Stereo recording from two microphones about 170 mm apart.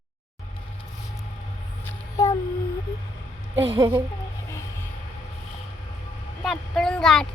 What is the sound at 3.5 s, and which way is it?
Speech, 15° right (ahead or behind).